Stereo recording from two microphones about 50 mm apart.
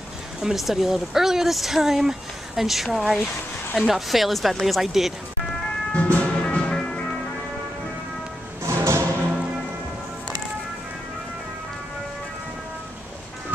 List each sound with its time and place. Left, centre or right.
0.4 s speech: centre
5.9 s music: left
8.6 s music: right